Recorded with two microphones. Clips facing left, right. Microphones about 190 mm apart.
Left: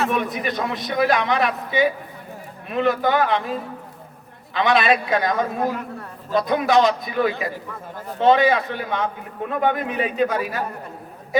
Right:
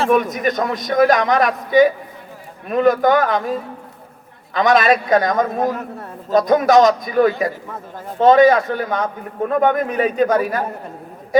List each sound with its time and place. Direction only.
0.1 s a man's voice: 45° right (ahead or behind)
4.5 s a man's voice: 45° right (ahead or behind)